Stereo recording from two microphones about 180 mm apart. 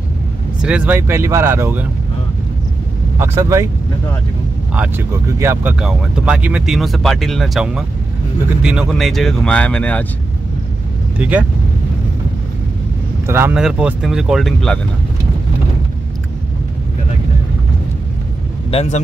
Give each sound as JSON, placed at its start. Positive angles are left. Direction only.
{"t": 0.6, "sound": "speech", "side_deg": -5}
{"t": 3.2, "sound": "speech", "side_deg": -15}
{"t": 4.7, "sound": "speech", "side_deg": -10}
{"t": 11.1, "sound": "speech", "side_deg": -10}
{"t": 13.3, "sound": "speech", "side_deg": -10}
{"t": 18.7, "sound": "speech", "side_deg": 35}